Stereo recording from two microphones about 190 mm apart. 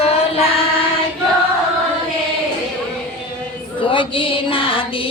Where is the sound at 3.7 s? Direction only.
25° left (ahead or behind).